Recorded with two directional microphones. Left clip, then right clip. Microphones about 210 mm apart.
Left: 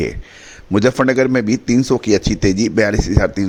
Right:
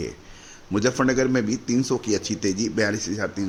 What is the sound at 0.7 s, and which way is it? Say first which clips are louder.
A man's voice: left 8 dB; 35° left (ahead or behind).